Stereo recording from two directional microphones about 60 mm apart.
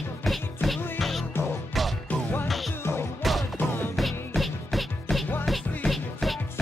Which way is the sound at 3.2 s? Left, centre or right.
Centre.